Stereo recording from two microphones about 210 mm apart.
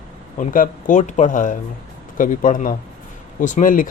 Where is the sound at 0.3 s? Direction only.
40° left (ahead or behind).